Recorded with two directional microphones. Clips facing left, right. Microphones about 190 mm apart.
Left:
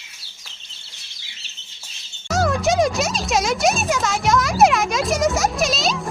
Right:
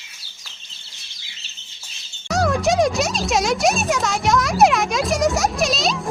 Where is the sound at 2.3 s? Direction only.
Centre (ahead or behind).